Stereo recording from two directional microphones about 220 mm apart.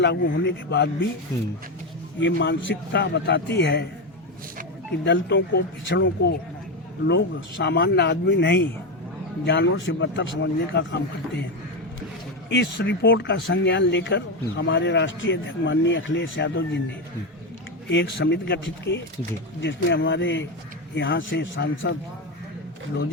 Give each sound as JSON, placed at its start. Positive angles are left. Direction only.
{"t": 0.0, "sound": "a man's voice", "side_deg": 50}
{"t": 2.2, "sound": "a man's voice", "side_deg": 55}
{"t": 5.0, "sound": "a man's voice", "side_deg": 50}
{"t": 12.5, "sound": "speech", "side_deg": 50}
{"t": 17.8, "sound": "a man's voice", "side_deg": 50}